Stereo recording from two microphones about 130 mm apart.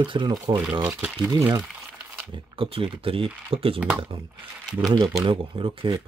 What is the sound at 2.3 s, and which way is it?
Speech, 40° right (ahead or behind).